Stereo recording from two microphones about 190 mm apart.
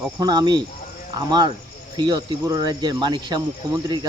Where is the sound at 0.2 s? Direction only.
20° right (ahead or behind).